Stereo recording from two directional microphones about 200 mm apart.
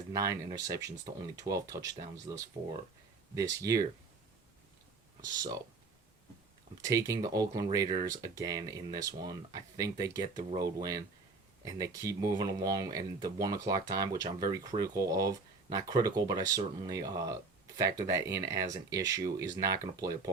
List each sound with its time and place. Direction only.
0.1 s speech: 15° right (ahead or behind)
5.2 s speech: 20° right (ahead or behind)
6.8 s speech: 15° right (ahead or behind)